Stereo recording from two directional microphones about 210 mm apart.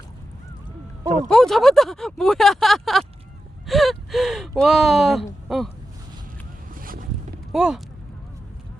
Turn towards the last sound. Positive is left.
turn(degrees=0)  # may be behind; listen again after turning